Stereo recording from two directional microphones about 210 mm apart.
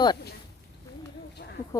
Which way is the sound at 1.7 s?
15° left (ahead or behind).